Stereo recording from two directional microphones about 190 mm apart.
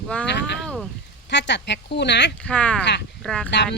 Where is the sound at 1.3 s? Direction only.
65° left (ahead or behind).